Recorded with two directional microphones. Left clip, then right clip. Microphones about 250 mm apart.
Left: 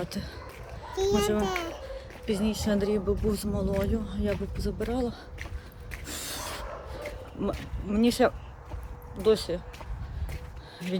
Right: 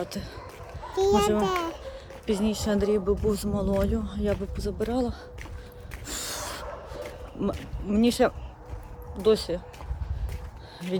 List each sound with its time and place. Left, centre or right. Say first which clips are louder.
0.0 s speech: right 2 dB; centre
0.9 s a child's voice: right 4 dB; centre
5.9 s snort: right 2 dB; centre
6.9 s a sound: right 1 dB; centre
9.2 s speech: right 2 dB; centre